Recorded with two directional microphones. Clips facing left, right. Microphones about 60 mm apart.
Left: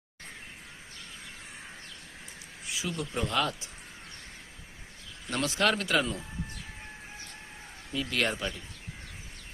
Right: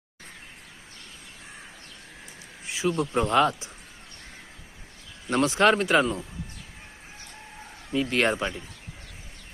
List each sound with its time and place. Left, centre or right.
2.6 s speech: right
5.3 s speech: right
7.9 s speech: right